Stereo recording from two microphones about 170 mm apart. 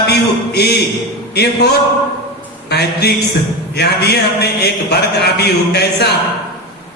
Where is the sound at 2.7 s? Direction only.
75° left (ahead or behind).